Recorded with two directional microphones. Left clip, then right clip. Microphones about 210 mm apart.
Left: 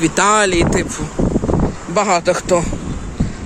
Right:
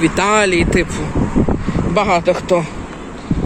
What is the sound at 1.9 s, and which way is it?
Speech, 15° left (ahead or behind).